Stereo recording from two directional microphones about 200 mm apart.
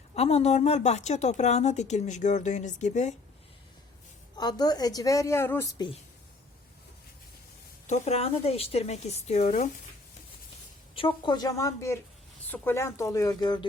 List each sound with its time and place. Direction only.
0.1 s a woman's voice: 30° left (ahead or behind)
4.4 s a woman's voice: 20° left (ahead or behind)
7.9 s a woman's voice: 35° left (ahead or behind)
10.9 s speech: 25° left (ahead or behind)